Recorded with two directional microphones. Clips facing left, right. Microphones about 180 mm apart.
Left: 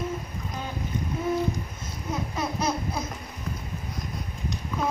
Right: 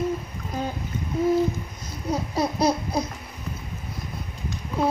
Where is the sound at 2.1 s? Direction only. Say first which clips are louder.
Right 5 dB; 35° right (ahead or behind).